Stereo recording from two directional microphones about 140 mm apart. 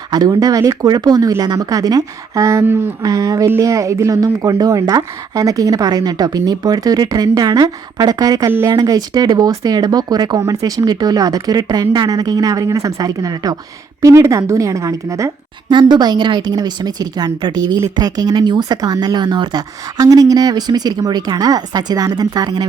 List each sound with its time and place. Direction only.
0.1 s a woman's voice: 25° right (ahead or behind)